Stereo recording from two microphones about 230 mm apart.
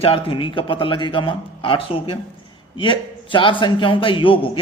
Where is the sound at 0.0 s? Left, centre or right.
Left.